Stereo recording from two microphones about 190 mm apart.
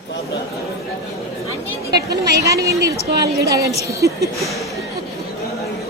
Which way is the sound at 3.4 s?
15° right (ahead or behind).